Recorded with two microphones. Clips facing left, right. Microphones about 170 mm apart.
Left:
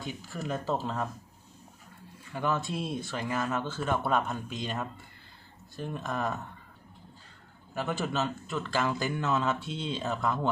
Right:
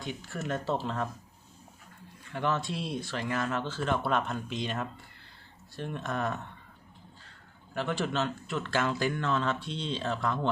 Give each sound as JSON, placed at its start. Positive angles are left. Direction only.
{"t": 0.0, "sound": "speech", "side_deg": 0}
{"t": 2.3, "sound": "speech", "side_deg": 5}
{"t": 7.7, "sound": "speech", "side_deg": 5}